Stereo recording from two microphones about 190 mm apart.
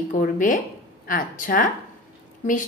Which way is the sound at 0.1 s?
45° left (ahead or behind).